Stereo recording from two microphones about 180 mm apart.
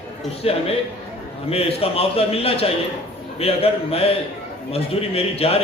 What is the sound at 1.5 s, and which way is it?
A man's voice, 35° left (ahead or behind).